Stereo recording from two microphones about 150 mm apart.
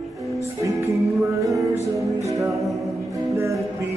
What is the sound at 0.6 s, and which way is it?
Music, 20° right (ahead or behind).